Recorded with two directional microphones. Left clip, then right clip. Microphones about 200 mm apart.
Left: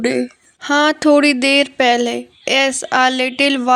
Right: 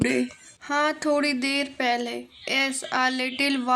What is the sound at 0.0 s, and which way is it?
Speech, 25° left (ahead or behind).